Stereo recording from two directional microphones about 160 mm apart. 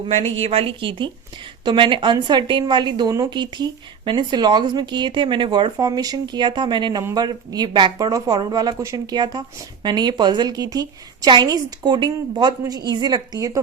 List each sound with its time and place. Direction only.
0.0 s a woman's voice: 40° right (ahead or behind); by 13.6 s 25° right (ahead or behind)